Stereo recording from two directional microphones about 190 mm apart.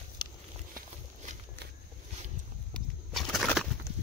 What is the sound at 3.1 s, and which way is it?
Bird, centre (ahead or behind).